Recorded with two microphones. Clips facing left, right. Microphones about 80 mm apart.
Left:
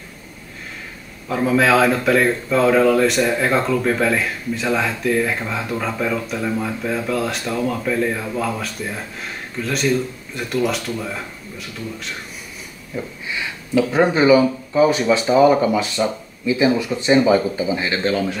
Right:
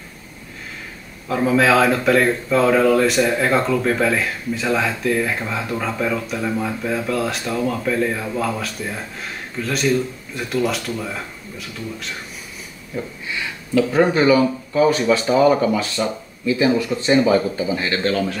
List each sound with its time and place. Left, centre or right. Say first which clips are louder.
1.3 s speech: even; centre
12.9 s speech: even; centre